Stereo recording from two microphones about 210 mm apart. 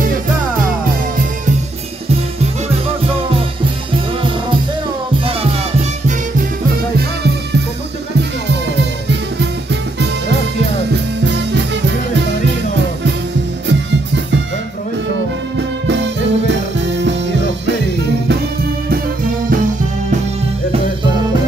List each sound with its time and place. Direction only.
5.2 s music: 30° right (ahead or behind)
10.9 s music: 55° right (ahead or behind)
13.7 s music: 60° right (ahead or behind)
15.9 s music: 60° right (ahead or behind)